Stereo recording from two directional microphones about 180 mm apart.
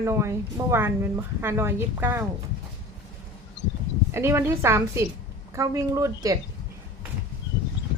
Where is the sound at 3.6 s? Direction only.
75° left (ahead or behind).